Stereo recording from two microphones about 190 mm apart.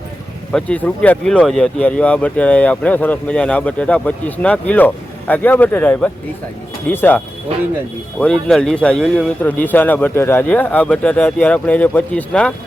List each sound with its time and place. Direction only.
0.5 s speech: 5° left (ahead or behind)
8.2 s speech: 5° left (ahead or behind)